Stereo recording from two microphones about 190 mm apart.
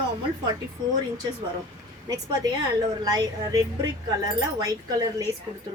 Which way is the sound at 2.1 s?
20° right (ahead or behind).